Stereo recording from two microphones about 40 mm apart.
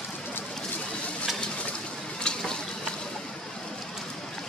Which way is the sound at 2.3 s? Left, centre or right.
Left.